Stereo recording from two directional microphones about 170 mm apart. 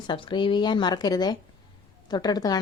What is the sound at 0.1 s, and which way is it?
Speech, 30° left (ahead or behind).